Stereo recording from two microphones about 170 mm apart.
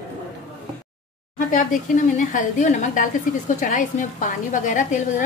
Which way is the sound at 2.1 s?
45° left (ahead or behind).